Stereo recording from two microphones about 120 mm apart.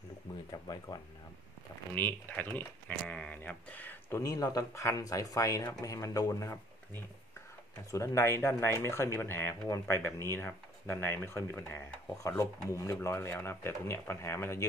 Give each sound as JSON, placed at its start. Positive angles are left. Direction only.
{"t": 0.5, "sound": "speech", "side_deg": 30}
{"t": 2.0, "sound": "speech", "side_deg": 15}
{"t": 4.2, "sound": "speech", "side_deg": 30}